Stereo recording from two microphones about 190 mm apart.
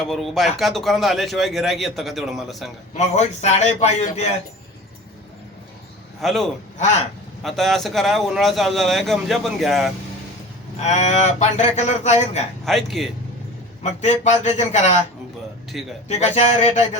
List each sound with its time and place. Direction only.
0.1 s a man's voice: centre (ahead or behind)
2.9 s speech: 35° left (ahead or behind)
6.2 s a man's voice: centre (ahead or behind)
6.7 s speech: 40° left (ahead or behind)
7.4 s a man's voice: centre (ahead or behind)
10.8 s speech: 35° left (ahead or behind)
12.6 s a man's voice: centre (ahead or behind)
13.8 s speech: 40° left (ahead or behind)
16.0 s speech: 35° left (ahead or behind)